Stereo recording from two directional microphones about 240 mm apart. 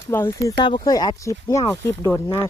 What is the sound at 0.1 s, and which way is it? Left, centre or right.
Speech, centre.